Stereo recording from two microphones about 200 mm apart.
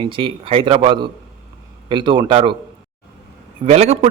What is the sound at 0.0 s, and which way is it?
A man's voice, 25° right (ahead or behind).